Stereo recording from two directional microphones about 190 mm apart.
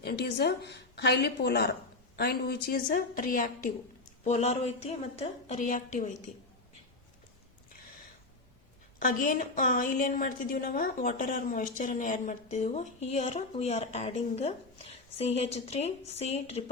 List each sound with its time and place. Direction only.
0.0 s a woman's voice: 55° left (ahead or behind)
4.2 s a woman's voice: 35° left (ahead or behind)
9.0 s a woman's voice: 45° left (ahead or behind)